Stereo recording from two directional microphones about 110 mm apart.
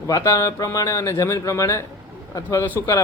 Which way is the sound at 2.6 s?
20° left (ahead or behind).